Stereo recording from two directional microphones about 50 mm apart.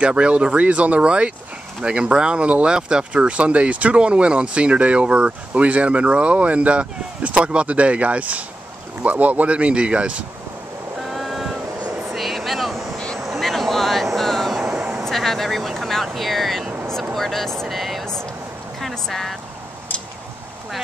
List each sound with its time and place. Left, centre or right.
0.0 s speech: right
11.0 s vehicle: centre
12.9 s a sound: centre
13.2 s vehicle: centre
17.1 s speech: centre
18.8 s a sound: centre